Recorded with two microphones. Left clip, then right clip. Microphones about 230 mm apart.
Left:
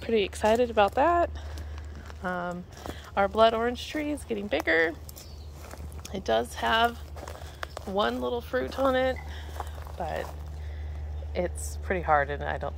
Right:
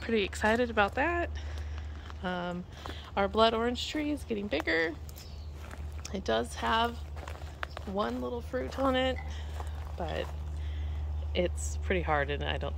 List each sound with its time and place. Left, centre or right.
0.0 s a woman's voice: centre
6.0 s speech: centre
7.2 s a sound: left
7.9 s speech: centre
9.9 s speech: centre
11.3 s a woman's voice: centre